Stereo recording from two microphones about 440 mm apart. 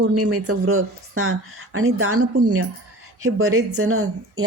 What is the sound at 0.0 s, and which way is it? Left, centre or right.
Speech, right.